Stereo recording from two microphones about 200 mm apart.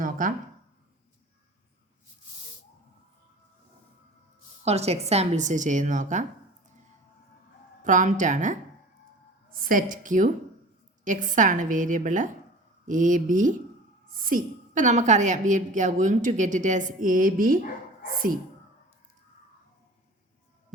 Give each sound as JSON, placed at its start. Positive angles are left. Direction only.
{"t": 0.0, "sound": "a sound", "side_deg": -40}
{"t": 4.6, "sound": "a woman's voice", "side_deg": -30}
{"t": 7.9, "sound": "a woman's voice", "side_deg": -40}